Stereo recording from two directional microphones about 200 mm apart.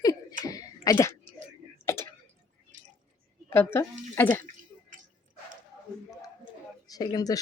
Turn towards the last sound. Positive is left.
turn(degrees=20)  # may be behind; listen again after turning